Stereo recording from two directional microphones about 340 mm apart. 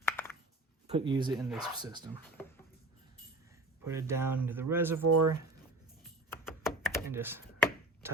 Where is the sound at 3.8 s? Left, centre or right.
Centre.